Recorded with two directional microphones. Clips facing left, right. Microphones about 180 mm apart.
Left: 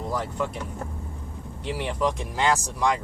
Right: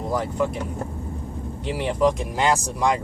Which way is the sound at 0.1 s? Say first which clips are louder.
Right 6 dB; 15° right (ahead or behind).